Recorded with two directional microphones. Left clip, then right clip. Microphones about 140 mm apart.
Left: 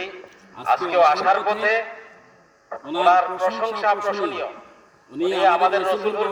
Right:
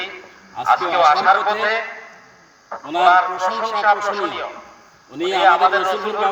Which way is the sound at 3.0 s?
15° left (ahead or behind).